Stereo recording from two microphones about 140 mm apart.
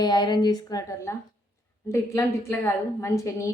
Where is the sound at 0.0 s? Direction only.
30° left (ahead or behind).